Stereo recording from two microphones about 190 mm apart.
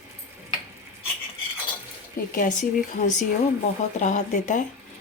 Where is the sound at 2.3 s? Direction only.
45° left (ahead or behind).